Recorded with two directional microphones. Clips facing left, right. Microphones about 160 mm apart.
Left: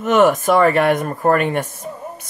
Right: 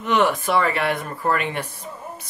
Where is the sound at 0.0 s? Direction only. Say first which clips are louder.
Left 6 dB; 45° left (ahead or behind).